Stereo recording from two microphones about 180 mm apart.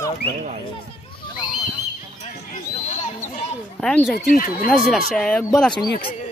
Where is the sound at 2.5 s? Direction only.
40° left (ahead or behind).